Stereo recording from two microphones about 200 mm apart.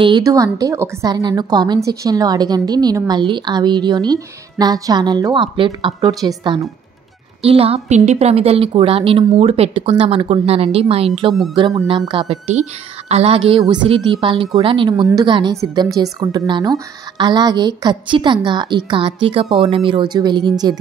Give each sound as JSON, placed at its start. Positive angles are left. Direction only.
{"t": 0.0, "sound": "a woman's voice", "side_deg": -20}